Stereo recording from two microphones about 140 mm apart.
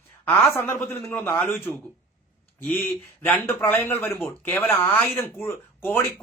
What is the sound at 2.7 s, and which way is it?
A man's voice, 15° left (ahead or behind).